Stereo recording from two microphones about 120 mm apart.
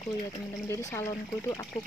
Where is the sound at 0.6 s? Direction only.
20° left (ahead or behind).